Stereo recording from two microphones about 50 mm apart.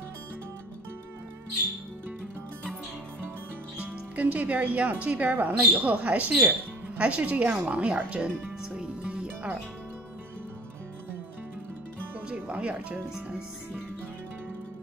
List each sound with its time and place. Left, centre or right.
3.7 s speech: right
8.7 s music: right
12.4 s music: right